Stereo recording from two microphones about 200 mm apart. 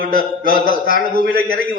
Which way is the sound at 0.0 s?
45° right (ahead or behind).